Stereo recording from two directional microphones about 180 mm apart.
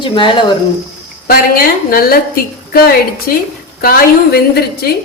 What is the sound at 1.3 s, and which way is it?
A woman's voice, 55° left (ahead or behind).